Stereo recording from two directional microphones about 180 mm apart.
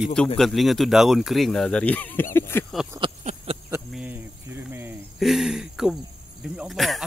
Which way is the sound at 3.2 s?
35° right (ahead or behind).